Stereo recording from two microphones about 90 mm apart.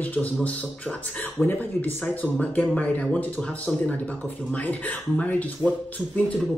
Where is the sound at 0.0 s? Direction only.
15° left (ahead or behind).